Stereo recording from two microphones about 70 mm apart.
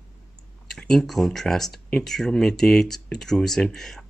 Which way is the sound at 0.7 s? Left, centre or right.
Centre.